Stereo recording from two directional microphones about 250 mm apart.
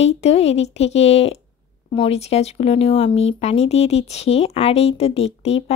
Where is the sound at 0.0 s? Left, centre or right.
Left.